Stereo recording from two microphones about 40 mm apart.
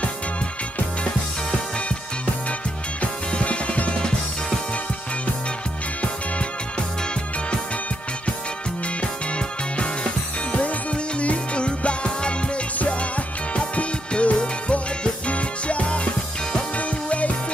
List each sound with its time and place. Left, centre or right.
3.0 s music: left
10.5 s music: left
13.6 s music: left